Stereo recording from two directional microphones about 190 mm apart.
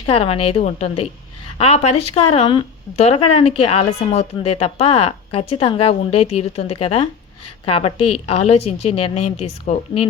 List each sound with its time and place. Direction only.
0.0 s speech: 30° left (ahead or behind)